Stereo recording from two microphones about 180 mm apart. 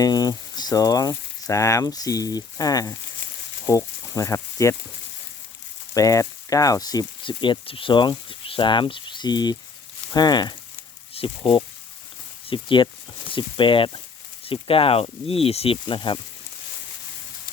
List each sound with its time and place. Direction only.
0.0 s speech: 20° left (ahead or behind)
5.9 s speech: 20° left (ahead or behind)